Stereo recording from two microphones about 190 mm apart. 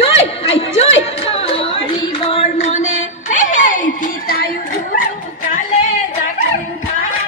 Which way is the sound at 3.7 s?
45° left (ahead or behind).